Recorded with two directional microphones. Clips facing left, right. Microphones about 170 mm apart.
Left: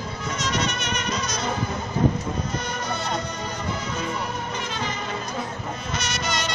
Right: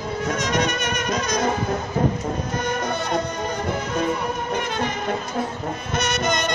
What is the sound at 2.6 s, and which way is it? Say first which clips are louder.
Music: right 5 dB; 50° right (ahead or behind).